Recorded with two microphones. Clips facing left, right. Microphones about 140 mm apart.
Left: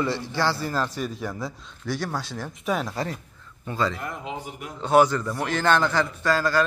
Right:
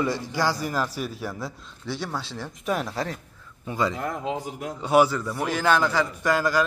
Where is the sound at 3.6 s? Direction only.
15° right (ahead or behind).